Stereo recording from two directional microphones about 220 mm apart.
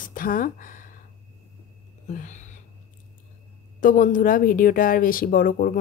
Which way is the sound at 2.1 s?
35° left (ahead or behind).